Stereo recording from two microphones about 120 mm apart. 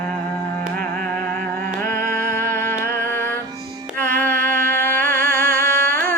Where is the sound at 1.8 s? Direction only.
20° left (ahead or behind).